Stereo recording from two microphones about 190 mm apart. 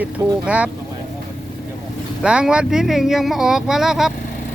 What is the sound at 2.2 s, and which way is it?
Speech, 5° right (ahead or behind).